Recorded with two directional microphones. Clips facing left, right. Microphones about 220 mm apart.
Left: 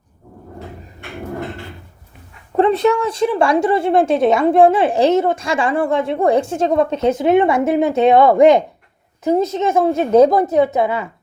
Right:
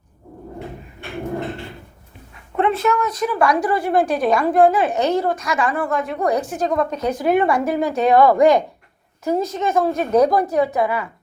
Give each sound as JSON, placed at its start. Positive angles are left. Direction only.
{"t": 2.6, "sound": "a woman's voice", "side_deg": 35}